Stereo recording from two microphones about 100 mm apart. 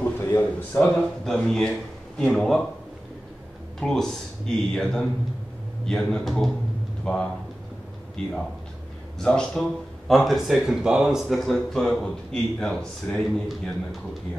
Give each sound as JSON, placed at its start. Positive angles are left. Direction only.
{"t": 0.2, "sound": "a sound", "side_deg": 25}
{"t": 0.7, "sound": "a man's voice", "side_deg": 5}
{"t": 3.8, "sound": "a man's voice", "side_deg": 5}